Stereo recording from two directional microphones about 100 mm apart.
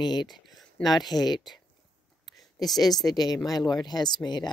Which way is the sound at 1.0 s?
45° left (ahead or behind).